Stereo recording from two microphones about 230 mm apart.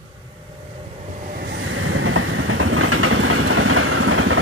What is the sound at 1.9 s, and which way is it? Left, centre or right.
Vehicle, right.